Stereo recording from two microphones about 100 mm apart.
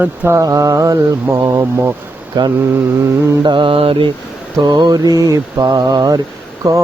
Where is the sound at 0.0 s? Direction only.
15° right (ahead or behind).